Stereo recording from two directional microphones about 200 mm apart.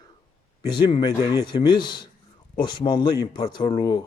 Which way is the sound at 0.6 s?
20° left (ahead or behind).